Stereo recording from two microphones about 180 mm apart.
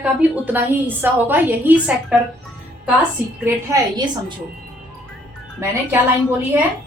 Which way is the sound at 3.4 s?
20° right (ahead or behind).